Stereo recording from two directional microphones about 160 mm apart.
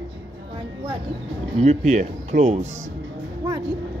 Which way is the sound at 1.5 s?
45° right (ahead or behind).